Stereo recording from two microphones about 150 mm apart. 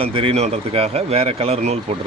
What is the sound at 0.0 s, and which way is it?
Speech, 40° right (ahead or behind).